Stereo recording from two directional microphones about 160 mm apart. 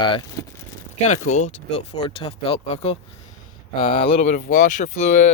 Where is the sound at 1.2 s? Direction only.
50° left (ahead or behind).